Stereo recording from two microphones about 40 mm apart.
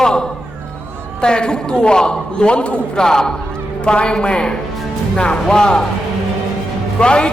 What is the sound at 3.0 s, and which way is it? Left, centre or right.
A man's voice, centre.